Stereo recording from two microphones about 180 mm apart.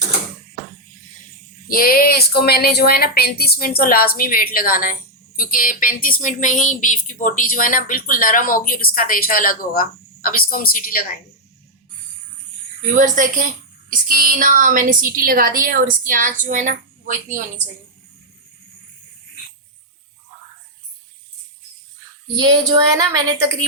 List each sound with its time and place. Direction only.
1.7 s speech: 55° left (ahead or behind)
13.0 s a woman's voice: 45° right (ahead or behind)
22.7 s a woman's voice: 25° right (ahead or behind)